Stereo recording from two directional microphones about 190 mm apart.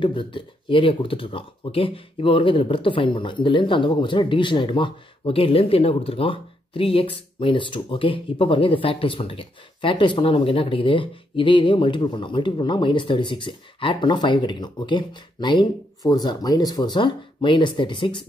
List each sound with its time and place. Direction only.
0.0 s speech: 25° left (ahead or behind)